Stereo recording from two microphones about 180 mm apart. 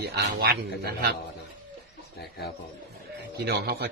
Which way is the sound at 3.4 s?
65° right (ahead or behind).